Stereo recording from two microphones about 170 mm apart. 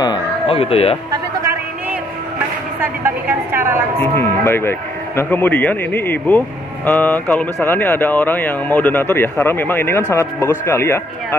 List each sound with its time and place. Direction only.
0.0 s a sound: 30° left (ahead or behind)
2.8 s a woman's voice: 10° right (ahead or behind)
4.0 s speech: 15° left (ahead or behind)